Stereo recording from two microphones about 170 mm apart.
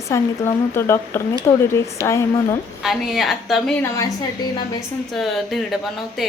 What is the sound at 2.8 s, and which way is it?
Speech, centre (ahead or behind).